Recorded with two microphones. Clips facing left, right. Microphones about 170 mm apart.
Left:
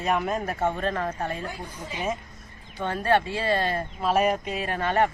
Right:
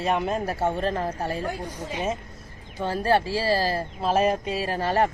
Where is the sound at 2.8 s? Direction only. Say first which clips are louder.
Right 1 dB; 30° right (ahead or behind).